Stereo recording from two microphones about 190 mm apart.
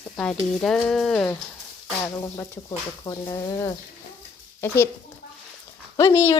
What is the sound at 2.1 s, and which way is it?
A woman's voice, 15° left (ahead or behind).